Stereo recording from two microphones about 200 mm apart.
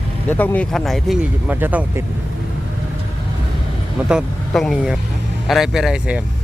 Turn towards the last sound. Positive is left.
turn(degrees=-5)  # may be behind; listen again after turning